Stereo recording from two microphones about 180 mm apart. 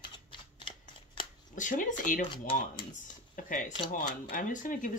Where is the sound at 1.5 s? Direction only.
45° left (ahead or behind).